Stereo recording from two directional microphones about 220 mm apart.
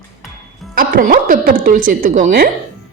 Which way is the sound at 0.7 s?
40° right (ahead or behind).